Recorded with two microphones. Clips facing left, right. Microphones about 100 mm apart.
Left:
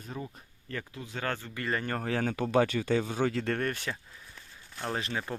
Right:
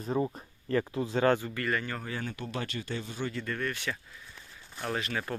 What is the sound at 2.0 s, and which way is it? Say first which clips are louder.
Speech: left 7 dB; 90° left.